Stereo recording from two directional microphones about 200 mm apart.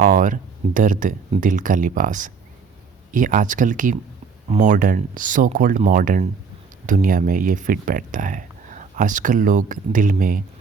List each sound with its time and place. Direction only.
0.0 s speech: 40° right (ahead or behind)